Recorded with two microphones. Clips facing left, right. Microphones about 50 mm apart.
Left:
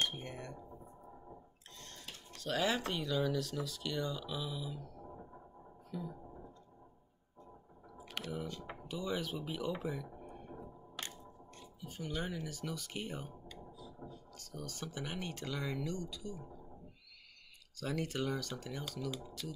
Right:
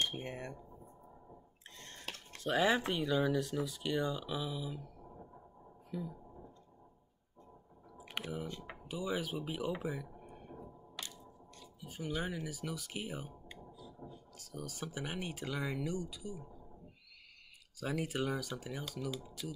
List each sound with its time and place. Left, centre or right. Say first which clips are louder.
0.2 s speech: right 3 dB; right
1.8 s a sound: right 1 dB; right
2.3 s speech: right 4 dB; right
8.0 s chewing: right 2 dB; centre
8.5 s speech: even; centre
10.1 s a sound: left 2 dB; centre
11.0 s crushing: left 2 dB; left
11.8 s speech: right 2 dB; centre
13.5 s a sound: left 1 dB; right
14.3 s speech: right 2 dB; centre
17.7 s speech: right 1 dB; centre